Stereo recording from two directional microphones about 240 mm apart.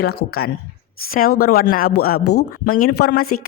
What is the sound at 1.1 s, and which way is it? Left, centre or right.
Speech, left.